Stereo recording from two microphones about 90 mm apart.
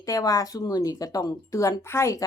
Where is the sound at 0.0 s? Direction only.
40° left (ahead or behind).